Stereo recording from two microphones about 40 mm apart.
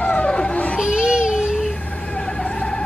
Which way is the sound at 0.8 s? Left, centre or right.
Right.